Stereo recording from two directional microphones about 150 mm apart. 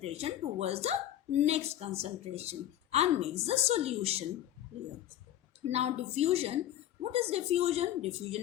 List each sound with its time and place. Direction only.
0.0 s a woman's voice: 45° right (ahead or behind)
5.7 s a woman's voice: 45° right (ahead or behind)